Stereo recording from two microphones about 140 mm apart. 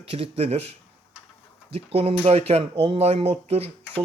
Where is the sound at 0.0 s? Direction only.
45° right (ahead or behind).